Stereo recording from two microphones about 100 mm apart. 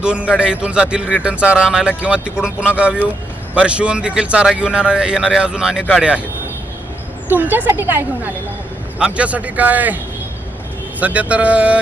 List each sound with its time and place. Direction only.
0.0 s a man's voice: 10° right (ahead or behind)
7.3 s a man's voice: 20° right (ahead or behind)
11.0 s a man's voice: 15° right (ahead or behind)